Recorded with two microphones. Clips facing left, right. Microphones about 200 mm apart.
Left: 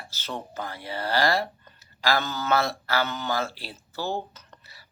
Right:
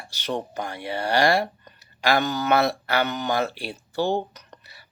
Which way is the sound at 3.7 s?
20° right (ahead or behind).